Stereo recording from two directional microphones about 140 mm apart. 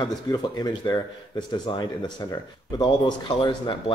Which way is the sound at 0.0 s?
30° left (ahead or behind).